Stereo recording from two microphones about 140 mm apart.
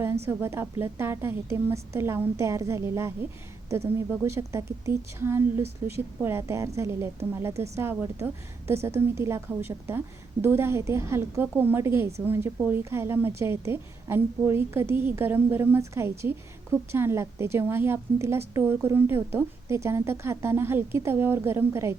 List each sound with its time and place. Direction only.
0.3 s a woman's voice: 15° right (ahead or behind)